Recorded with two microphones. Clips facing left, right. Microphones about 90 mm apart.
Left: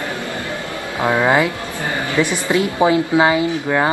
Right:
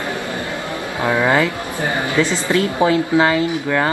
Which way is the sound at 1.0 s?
20° left (ahead or behind).